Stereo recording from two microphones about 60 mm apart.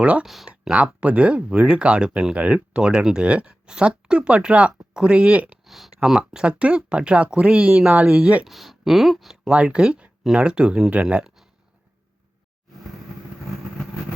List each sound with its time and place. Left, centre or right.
0.0 s speech: right
0.3 s speech: centre
0.8 s speech: right
5.6 s speech: centre; by 8.4 s right
8.4 s speech: centre
9.5 s speech: centre